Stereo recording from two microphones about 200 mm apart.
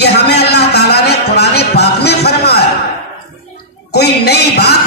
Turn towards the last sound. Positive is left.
turn(degrees=55)  # may be behind; listen again after turning